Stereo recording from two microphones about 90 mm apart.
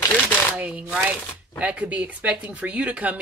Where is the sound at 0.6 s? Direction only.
10° right (ahead or behind).